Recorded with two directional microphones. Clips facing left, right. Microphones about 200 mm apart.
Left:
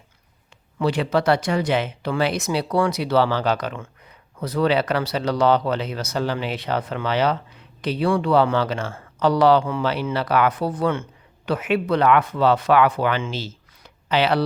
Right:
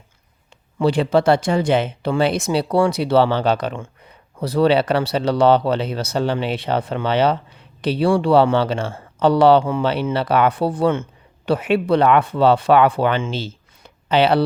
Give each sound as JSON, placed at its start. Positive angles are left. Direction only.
{"t": 0.8, "sound": "speech", "side_deg": -30}